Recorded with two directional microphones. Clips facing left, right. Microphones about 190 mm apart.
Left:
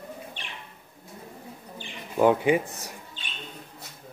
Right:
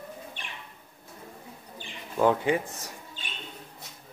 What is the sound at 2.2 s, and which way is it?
Speech, 15° left (ahead or behind).